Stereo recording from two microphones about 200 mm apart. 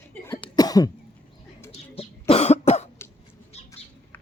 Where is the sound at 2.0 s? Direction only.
30° left (ahead or behind).